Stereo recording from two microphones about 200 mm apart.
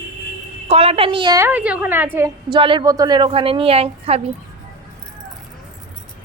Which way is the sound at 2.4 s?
25° right (ahead or behind).